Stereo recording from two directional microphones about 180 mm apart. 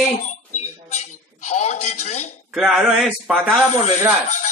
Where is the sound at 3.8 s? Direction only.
40° left (ahead or behind).